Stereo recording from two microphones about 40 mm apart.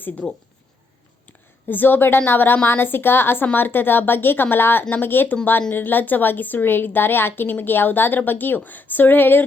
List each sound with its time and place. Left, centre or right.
1.6 s a woman's voice: left
3.4 s a woman's voice: left